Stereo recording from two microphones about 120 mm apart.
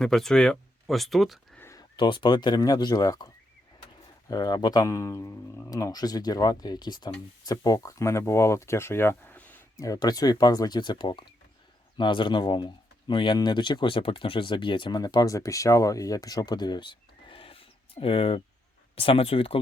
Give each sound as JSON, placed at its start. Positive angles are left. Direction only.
{"t": 0.0, "sound": "speech", "side_deg": 5}
{"t": 1.5, "sound": "a sound", "side_deg": 20}
{"t": 2.0, "sound": "speech", "side_deg": 40}
{"t": 4.3, "sound": "speech", "side_deg": 30}
{"t": 9.7, "sound": "speech", "side_deg": 30}